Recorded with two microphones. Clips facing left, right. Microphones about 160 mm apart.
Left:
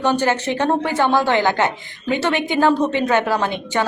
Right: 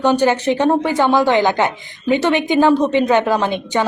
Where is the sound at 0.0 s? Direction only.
15° right (ahead or behind).